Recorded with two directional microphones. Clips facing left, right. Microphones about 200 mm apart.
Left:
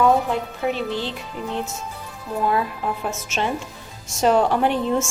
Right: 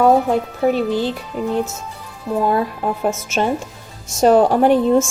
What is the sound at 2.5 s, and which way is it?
A woman's voice, 40° right (ahead or behind).